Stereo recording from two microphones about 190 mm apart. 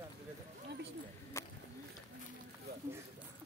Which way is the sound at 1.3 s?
15° left (ahead or behind).